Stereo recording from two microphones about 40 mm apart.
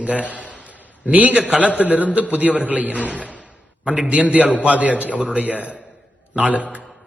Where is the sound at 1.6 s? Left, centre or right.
Right.